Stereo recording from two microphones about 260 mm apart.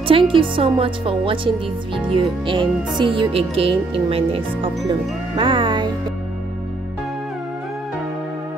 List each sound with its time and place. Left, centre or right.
0.1 s a woman's voice: centre